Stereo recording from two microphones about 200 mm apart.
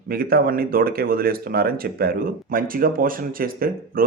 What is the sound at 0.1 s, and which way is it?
Speech, 50° right (ahead or behind).